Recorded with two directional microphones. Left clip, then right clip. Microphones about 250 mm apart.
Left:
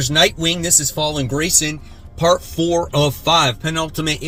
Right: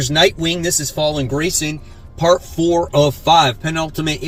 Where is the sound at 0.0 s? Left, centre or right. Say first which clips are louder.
Right 1 dB; centre.